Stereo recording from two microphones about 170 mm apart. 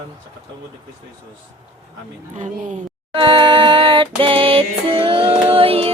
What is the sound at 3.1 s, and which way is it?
Music, 30° right (ahead or behind).